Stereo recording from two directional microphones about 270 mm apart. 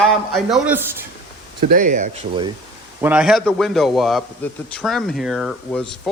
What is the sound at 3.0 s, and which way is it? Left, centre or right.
A man's voice, centre.